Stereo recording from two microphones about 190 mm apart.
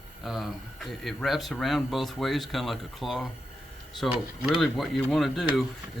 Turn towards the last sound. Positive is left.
turn(degrees=0)  # may be behind; listen again after turning